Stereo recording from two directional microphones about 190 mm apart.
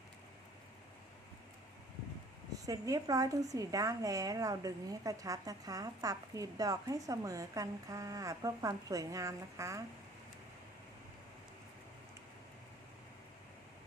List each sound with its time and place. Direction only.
2.6 s a woman's voice: 20° right (ahead or behind)